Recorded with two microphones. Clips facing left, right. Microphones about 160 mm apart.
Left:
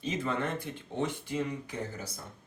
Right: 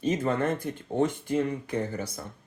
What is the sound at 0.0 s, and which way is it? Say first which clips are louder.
Speech: right 6 dB; 45° right (ahead or behind).